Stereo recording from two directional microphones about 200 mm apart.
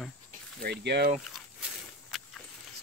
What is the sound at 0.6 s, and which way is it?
Speech, 55° right (ahead or behind).